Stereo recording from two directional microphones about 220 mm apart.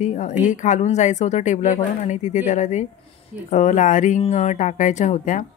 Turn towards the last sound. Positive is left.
turn(degrees=35)  # may be behind; listen again after turning